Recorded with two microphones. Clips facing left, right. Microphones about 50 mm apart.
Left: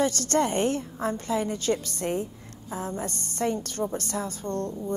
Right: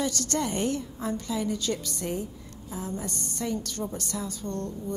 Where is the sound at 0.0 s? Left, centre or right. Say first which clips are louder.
Left 5 dB; left.